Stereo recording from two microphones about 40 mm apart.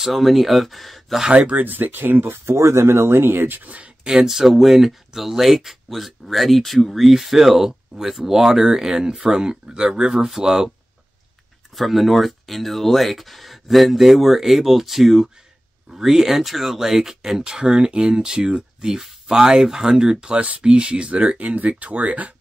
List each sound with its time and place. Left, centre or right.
0.0 s speech: centre
1.3 s speech: right
1.6 s speech: right
2.4 s speech: right
3.6 s speech: right
4.2 s speech: centre
11.7 s speech: centre; by 22.3 s right